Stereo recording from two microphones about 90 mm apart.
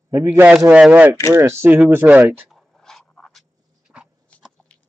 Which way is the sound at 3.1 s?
5° left (ahead or behind).